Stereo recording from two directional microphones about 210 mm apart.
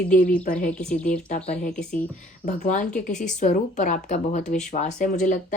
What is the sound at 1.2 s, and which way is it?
Speech, 35° left (ahead or behind).